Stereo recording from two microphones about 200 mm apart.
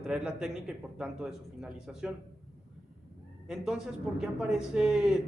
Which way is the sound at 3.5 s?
5° right (ahead or behind).